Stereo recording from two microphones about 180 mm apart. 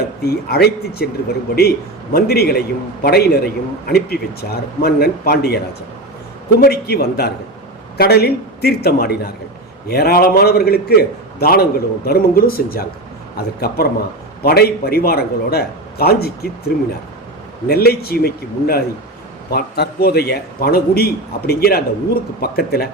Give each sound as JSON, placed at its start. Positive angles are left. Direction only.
{"t": 0.2, "sound": "a man's voice", "side_deg": 60}
{"t": 6.6, "sound": "a man's voice", "side_deg": 60}